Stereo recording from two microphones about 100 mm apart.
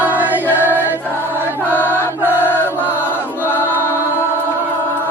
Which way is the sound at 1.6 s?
20° left (ahead or behind).